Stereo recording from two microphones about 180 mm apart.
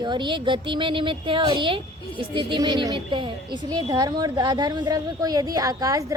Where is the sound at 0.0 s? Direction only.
25° right (ahead or behind).